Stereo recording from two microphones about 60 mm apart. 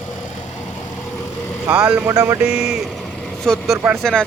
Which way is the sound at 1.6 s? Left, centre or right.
Right.